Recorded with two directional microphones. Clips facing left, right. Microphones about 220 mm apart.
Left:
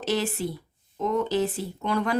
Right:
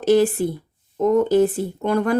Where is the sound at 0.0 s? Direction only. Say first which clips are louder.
Right 11 dB; 50° right (ahead or behind).